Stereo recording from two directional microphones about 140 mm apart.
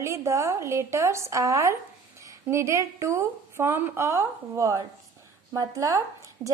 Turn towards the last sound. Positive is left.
turn(degrees=-25)  # may be behind; listen again after turning